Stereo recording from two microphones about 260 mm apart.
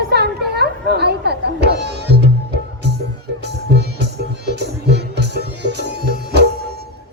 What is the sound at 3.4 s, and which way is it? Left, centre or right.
Music, right.